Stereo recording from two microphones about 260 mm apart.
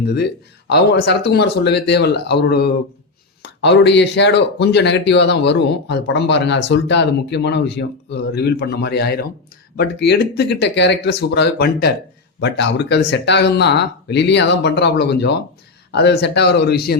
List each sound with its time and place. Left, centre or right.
0.0 s speech: left